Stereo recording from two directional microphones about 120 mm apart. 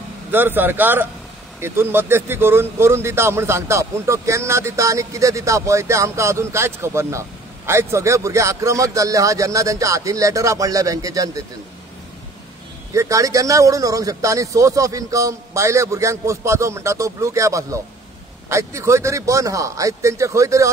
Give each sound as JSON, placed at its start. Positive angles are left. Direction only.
{"t": 0.3, "sound": "a man's voice", "side_deg": -15}
{"t": 12.9, "sound": "a man's voice", "side_deg": -25}